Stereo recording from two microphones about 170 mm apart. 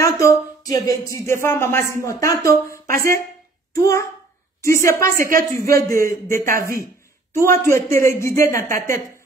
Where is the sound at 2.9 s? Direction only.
55° right (ahead or behind).